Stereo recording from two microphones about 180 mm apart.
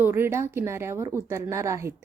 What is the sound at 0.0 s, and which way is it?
Speech, 10° right (ahead or behind).